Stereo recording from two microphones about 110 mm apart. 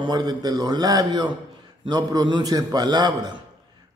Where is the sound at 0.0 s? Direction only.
40° right (ahead or behind).